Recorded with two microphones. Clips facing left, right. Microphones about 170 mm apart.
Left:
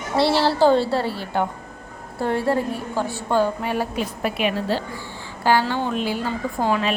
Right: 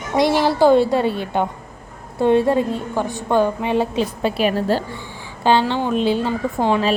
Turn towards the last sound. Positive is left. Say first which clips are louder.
# right 3 dB
turn(degrees=-20)  # may be behind; listen again after turning